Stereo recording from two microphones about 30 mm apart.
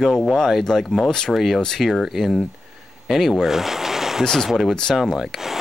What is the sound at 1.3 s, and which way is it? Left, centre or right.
Speech, centre.